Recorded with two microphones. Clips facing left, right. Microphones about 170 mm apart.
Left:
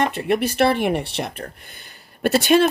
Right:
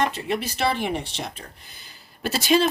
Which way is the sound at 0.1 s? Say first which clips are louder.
Left 7 dB; 60° left (ahead or behind).